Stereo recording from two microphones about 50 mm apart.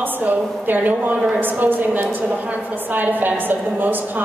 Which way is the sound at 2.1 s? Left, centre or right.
Right.